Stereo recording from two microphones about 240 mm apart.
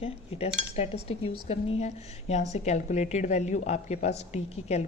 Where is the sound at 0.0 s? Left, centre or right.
Left.